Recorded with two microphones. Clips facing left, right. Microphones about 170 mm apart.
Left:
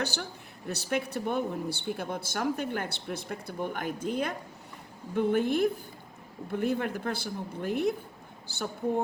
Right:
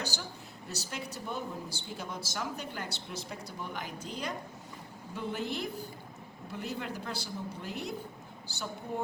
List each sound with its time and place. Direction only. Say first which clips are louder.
0.0 s a man's voice: left 6 dB; 60° left (ahead or behind)